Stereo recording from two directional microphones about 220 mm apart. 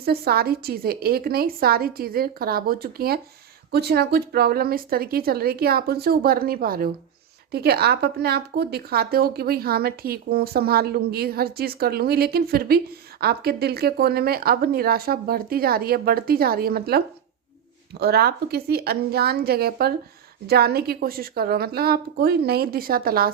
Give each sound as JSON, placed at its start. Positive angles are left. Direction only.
{"t": 0.0, "sound": "speech", "side_deg": -45}
{"t": 18.0, "sound": "speech", "side_deg": -45}